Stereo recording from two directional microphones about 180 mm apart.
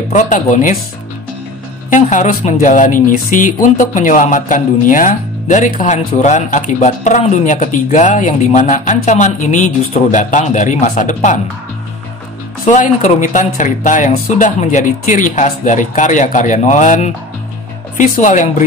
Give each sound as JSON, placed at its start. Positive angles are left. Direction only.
{"t": 0.1, "sound": "speech", "side_deg": 45}
{"t": 1.9, "sound": "speech", "side_deg": 45}
{"t": 12.6, "sound": "speech", "side_deg": 40}